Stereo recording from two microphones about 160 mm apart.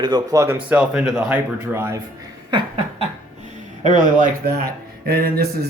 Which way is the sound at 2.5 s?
30° right (ahead or behind).